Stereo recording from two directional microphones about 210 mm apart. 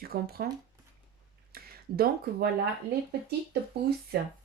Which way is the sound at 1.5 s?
45° right (ahead or behind).